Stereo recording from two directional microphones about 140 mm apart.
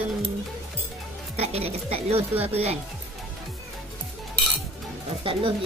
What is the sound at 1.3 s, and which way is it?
Speech, 45° right (ahead or behind).